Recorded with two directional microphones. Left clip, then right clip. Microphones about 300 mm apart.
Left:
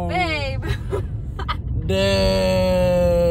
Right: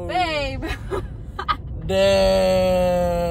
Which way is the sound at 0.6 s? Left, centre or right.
Right.